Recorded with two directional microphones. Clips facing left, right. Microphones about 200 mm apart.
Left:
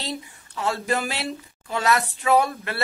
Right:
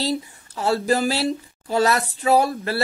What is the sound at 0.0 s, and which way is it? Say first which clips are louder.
Speech: right 8 dB; 35° right (ahead or behind).